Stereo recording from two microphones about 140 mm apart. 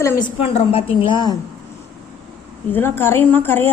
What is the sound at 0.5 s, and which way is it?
Speech, 40° left (ahead or behind).